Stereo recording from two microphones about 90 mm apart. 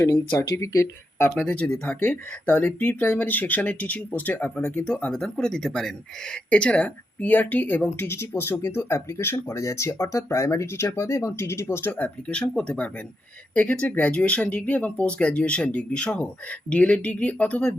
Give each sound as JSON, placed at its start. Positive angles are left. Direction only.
{"t": 0.3, "sound": "speech", "side_deg": 30}
{"t": 1.5, "sound": "speech", "side_deg": 15}